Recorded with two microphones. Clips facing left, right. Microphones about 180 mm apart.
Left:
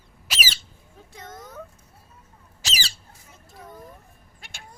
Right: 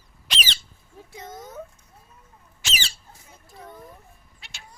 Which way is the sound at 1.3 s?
25° right (ahead or behind).